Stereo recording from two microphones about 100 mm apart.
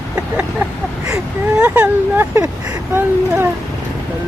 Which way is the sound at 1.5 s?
15° right (ahead or behind).